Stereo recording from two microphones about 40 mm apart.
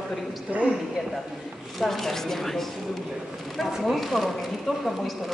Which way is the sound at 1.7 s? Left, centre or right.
Centre.